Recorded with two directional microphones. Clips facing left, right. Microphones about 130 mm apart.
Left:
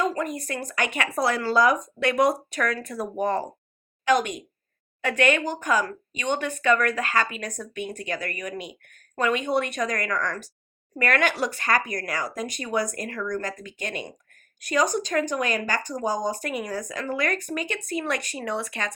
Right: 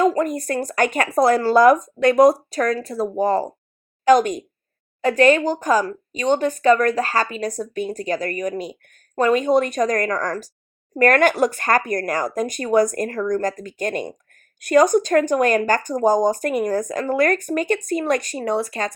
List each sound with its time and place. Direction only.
0.0 s speech: 45° right (ahead or behind)